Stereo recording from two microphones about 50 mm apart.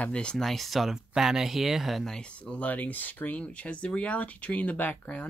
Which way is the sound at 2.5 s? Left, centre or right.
Left.